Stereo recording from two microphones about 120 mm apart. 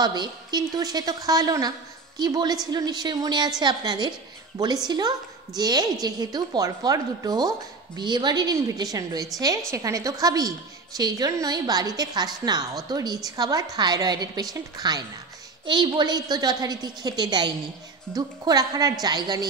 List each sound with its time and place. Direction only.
0.0 s a woman's voice: 35° right (ahead or behind)